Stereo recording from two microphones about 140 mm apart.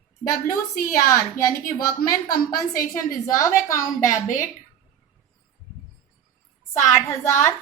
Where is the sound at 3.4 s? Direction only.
20° left (ahead or behind).